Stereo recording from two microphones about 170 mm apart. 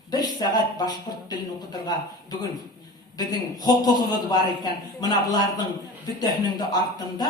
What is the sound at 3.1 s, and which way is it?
A man's voice, 25° left (ahead or behind).